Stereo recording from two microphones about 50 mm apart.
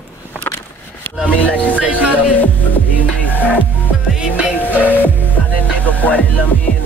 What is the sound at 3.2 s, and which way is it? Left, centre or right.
Music, left.